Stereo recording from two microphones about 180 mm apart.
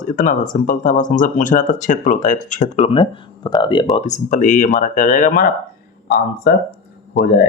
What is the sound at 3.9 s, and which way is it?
Speech, 40° left (ahead or behind).